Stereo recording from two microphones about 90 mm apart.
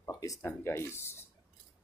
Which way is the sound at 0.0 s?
40° left (ahead or behind).